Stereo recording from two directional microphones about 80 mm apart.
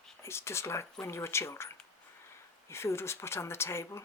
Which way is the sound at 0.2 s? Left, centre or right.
Left.